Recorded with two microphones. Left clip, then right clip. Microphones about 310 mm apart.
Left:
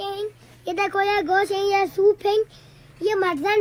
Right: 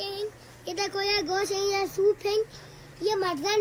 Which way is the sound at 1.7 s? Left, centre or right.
Left.